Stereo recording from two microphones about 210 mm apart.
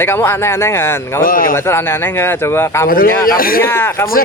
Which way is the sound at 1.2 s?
40° left (ahead or behind).